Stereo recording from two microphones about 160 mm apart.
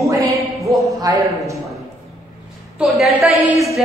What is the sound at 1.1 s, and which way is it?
Speech, 20° right (ahead or behind).